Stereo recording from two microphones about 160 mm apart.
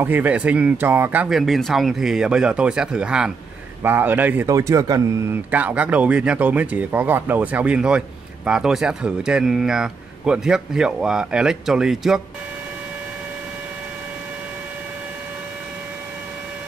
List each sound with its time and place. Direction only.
0.0 s speech: 10° right (ahead or behind)
5.5 s speech: 10° right (ahead or behind)